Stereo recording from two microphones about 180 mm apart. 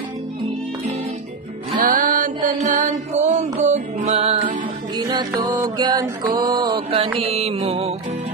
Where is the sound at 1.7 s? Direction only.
50° right (ahead or behind).